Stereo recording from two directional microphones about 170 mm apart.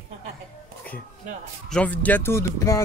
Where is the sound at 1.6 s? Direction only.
5° left (ahead or behind).